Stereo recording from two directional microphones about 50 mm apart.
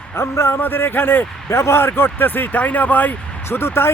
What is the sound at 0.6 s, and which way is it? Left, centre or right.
Speech, left.